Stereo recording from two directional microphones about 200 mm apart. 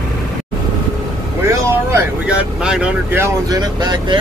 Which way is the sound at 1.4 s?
10° right (ahead or behind).